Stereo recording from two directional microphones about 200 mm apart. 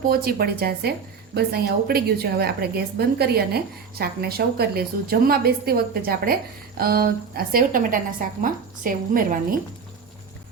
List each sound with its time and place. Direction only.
0.1 s a woman's voice: 50° right (ahead or behind)